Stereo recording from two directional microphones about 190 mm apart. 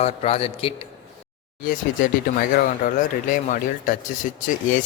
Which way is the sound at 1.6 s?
45° left (ahead or behind).